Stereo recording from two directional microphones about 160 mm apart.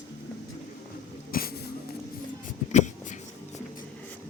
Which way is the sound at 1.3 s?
65° left (ahead or behind).